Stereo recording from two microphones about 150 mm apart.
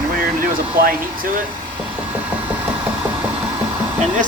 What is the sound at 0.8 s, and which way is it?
Speech, 70° right (ahead or behind).